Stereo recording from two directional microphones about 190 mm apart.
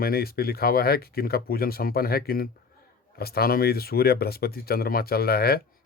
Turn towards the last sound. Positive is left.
turn(degrees=55)  # may be behind; listen again after turning